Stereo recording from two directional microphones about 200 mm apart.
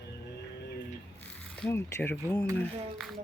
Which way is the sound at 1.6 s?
10° left (ahead or behind).